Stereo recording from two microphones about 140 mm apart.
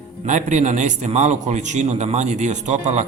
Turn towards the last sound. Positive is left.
turn(degrees=-55)  # may be behind; listen again after turning